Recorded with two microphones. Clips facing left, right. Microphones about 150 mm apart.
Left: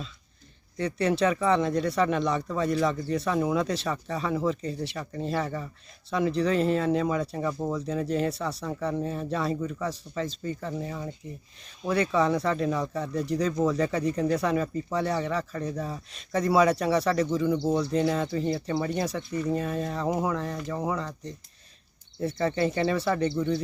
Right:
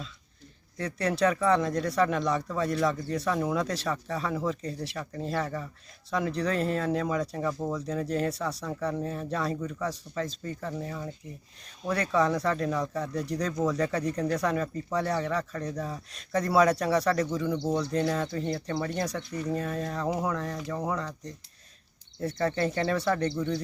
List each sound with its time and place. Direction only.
0.8 s speech: centre (ahead or behind)